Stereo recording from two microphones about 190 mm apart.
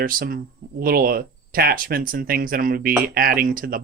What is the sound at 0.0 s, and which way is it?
Speech, 50° right (ahead or behind).